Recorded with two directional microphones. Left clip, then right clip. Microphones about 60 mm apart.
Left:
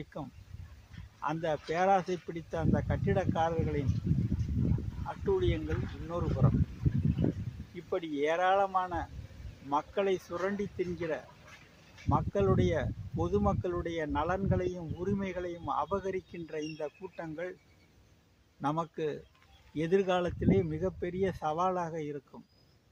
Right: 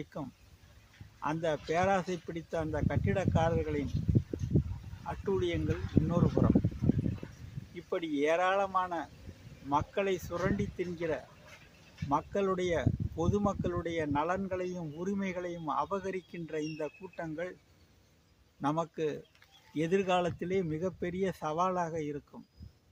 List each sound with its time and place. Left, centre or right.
0.0 s speech: right
4.1 s a sound: centre
5.0 s speech: right
5.6 s speech: centre
6.4 s speech: right
7.8 s speech: right
18.6 s speech: right